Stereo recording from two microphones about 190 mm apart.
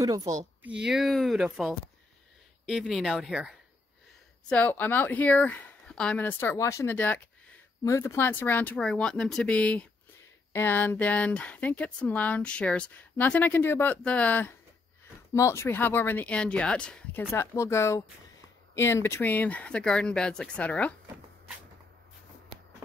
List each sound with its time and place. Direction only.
0.0 s speech: 20° right (ahead or behind)
0.7 s speech: 5° right (ahead or behind)
4.5 s speech: 10° left (ahead or behind)